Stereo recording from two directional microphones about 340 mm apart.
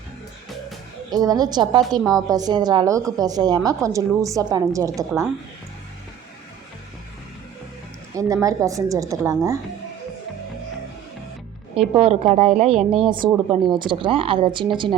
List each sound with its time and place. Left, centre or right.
1.1 s a woman's voice: centre
8.1 s a woman's voice: centre
11.9 s a woman's voice: centre